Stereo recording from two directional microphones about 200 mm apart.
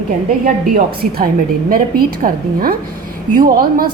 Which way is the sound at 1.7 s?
45° right (ahead or behind).